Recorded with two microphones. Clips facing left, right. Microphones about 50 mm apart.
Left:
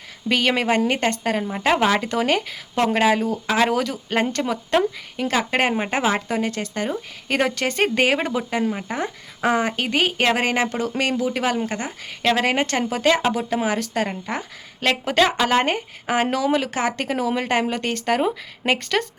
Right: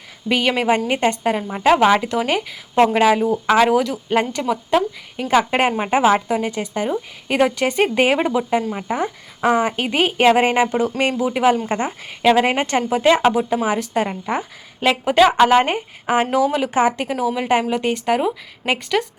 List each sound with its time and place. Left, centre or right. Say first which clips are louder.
0.3 s speech: right 2 dB; centre
3.2 s speech: right 6 dB; right
3.6 s speech: right 4 dB; centre; by 11.9 s right
12.2 s a woman's voice: right 4 dB; centre
14.8 s speech: right 5 dB; centre
17.3 s speech: right 3 dB; centre